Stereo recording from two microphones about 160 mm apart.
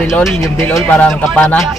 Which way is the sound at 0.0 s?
Centre (ahead or behind).